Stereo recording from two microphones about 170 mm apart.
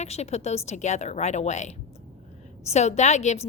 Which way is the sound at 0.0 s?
40° left (ahead or behind).